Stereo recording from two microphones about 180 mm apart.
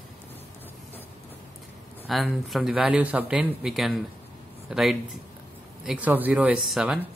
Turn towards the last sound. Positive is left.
turn(degrees=-5)  # may be behind; listen again after turning